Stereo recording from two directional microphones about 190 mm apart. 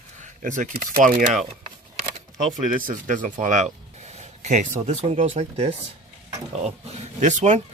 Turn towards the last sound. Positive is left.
turn(degrees=-35)  # may be behind; listen again after turning